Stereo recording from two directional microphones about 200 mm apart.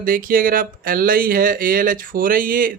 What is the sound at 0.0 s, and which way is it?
Speech, 45° right (ahead or behind).